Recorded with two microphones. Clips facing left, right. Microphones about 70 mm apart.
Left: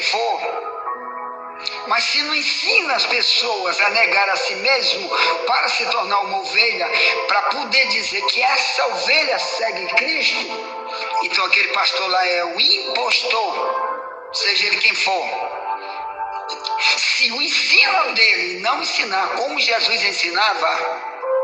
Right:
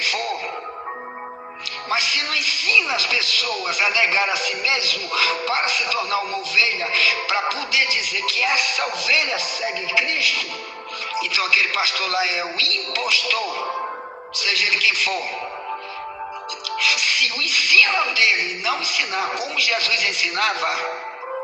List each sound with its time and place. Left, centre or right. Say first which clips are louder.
0.0 s music: left 5 dB; left
1.9 s speech: left 3 dB; left
16.6 s speech: left 1 dB; left